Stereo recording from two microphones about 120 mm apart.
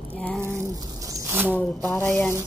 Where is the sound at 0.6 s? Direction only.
25° right (ahead or behind).